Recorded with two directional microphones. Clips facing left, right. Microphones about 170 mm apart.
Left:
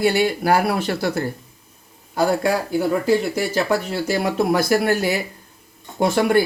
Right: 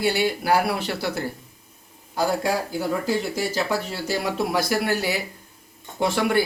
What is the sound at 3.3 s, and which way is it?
Speech, 55° left (ahead or behind).